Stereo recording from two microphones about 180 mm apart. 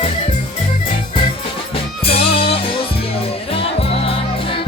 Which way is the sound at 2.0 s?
30° left (ahead or behind).